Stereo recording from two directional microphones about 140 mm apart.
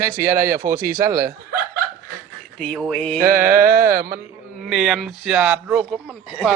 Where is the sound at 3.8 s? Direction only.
90° right.